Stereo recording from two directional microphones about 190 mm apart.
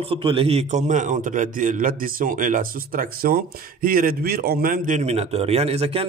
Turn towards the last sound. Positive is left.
turn(degrees=-30)  # may be behind; listen again after turning